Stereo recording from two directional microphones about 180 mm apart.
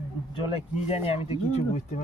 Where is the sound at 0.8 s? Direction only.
35° left (ahead or behind).